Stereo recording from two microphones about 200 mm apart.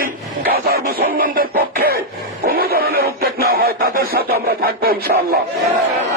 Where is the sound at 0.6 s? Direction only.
50° right (ahead or behind).